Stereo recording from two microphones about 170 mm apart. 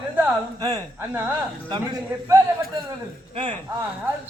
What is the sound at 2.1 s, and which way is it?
Speech, 15° right (ahead or behind).